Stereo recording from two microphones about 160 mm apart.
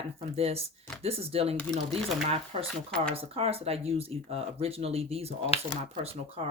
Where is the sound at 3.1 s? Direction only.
40° right (ahead or behind).